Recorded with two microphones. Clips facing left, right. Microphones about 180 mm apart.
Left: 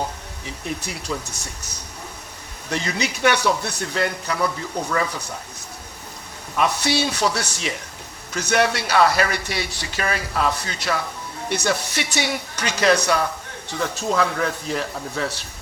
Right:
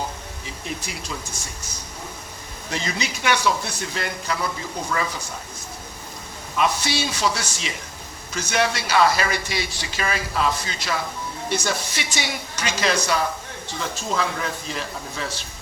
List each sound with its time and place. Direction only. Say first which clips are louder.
0.8 s speech: left 4 dB; 65° left (ahead or behind)
6.6 s speech: left 2 dB; 65° left (ahead or behind)